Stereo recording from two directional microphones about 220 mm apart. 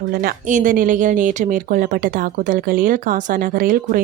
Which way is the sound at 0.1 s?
40° right (ahead or behind).